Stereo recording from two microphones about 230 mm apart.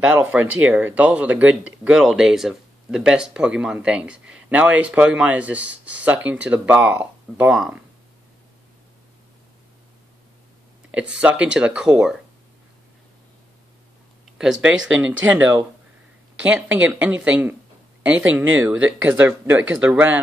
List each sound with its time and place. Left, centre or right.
0.0 s speech: centre
10.9 s speech: centre
14.4 s speech: centre
18.6 s speech: centre